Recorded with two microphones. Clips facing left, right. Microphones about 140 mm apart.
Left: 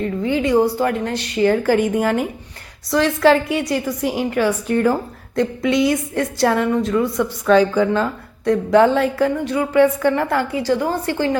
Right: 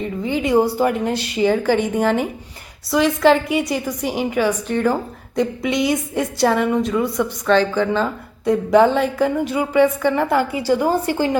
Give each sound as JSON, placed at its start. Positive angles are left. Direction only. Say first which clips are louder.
{"t": 0.0, "sound": "a woman's voice", "louder": "left 2 dB", "side_deg": 0}